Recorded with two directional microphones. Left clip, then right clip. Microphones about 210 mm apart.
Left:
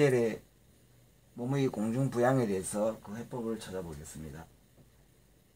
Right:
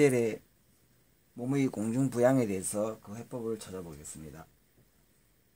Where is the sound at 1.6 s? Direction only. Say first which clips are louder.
Even; 45° right (ahead or behind).